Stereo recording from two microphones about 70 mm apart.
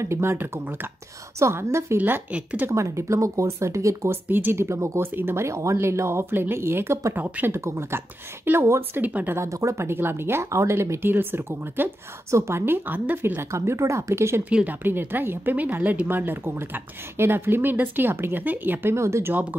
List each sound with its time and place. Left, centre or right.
0.0 s speech: right
2.0 s speech: right
2.7 s speech: right
4.3 s speech: right
9.0 s speech: right
9.3 s speech: right
12.3 s speech: right
14.5 s speech: centre
14.8 s speech: right